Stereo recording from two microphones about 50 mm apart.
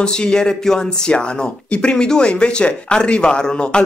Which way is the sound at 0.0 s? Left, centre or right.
Centre.